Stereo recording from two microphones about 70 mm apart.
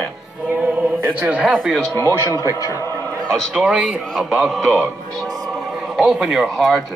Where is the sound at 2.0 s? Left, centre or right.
Left.